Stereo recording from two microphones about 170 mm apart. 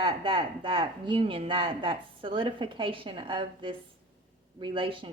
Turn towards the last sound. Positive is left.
turn(degrees=-30)  # may be behind; listen again after turning